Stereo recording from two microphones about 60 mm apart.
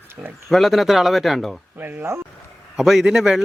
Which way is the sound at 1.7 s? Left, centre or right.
Right.